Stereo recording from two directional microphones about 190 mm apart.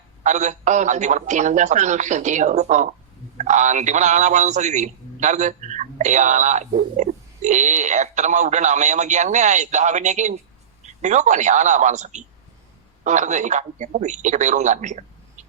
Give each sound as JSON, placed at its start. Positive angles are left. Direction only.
{"t": 0.2, "sound": "a man's voice", "side_deg": -40}